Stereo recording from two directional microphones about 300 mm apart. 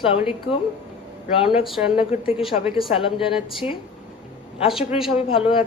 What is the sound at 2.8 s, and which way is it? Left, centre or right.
Speech, centre.